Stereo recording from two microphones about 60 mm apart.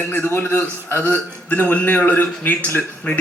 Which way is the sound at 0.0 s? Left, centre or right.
Left.